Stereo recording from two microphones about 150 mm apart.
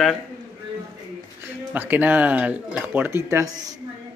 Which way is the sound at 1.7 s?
10° right (ahead or behind).